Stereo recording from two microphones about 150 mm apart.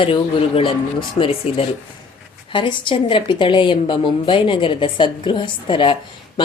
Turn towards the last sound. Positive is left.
turn(degrees=35)  # may be behind; listen again after turning